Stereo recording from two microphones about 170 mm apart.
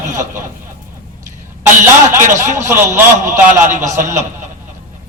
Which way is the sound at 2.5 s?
20° right (ahead or behind).